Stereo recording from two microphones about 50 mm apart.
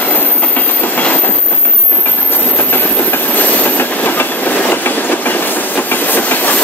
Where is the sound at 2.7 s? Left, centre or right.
Left.